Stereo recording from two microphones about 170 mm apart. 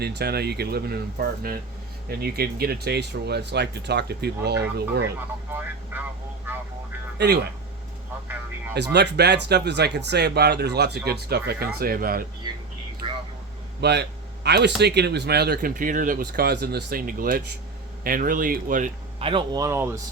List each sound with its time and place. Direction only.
0.0 s speech: 70° right (ahead or behind)
5.5 s speech: 10° right (ahead or behind)
8.7 s speech: 85° right; by 12.2 s 60° right (ahead or behind)
13.0 s a sound: 30° right (ahead or behind)
13.8 s a man's voice: 80° right; by 18.9 s 55° right (ahead or behind)
19.2 s speech: 30° right (ahead or behind); by 20.0 s 15° right (ahead or behind)